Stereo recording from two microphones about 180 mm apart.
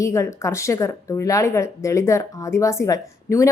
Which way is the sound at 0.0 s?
15° left (ahead or behind).